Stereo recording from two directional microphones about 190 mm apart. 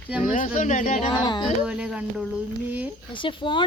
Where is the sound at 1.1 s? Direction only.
25° left (ahead or behind).